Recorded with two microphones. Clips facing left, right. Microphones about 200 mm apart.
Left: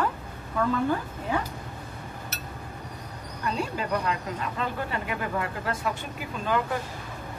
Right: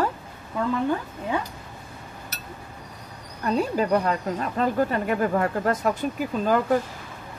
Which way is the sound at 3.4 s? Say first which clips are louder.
Right 7 dB; 40° right (ahead or behind).